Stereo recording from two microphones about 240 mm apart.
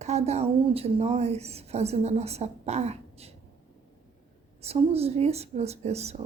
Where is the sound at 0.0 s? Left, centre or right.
Right.